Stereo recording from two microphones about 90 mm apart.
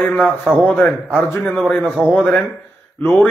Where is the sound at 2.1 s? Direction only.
20° left (ahead or behind).